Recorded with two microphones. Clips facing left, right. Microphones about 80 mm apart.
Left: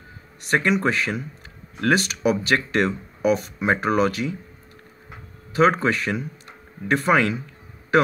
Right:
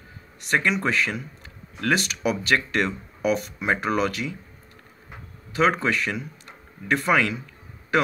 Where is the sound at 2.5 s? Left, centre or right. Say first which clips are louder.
Left 2 dB; left.